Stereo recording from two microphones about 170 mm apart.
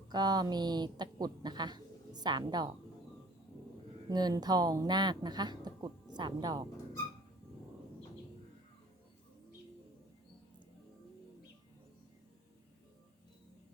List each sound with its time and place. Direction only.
0.1 s a woman's voice: 25° right (ahead or behind)
4.1 s a woman's voice: 25° right (ahead or behind)